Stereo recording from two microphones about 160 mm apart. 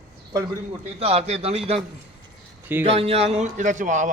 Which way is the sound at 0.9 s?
40° right (ahead or behind).